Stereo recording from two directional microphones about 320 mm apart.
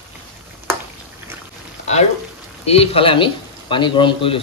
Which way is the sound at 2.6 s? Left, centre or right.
Centre.